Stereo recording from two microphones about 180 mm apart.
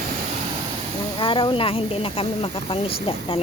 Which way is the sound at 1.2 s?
30° left (ahead or behind).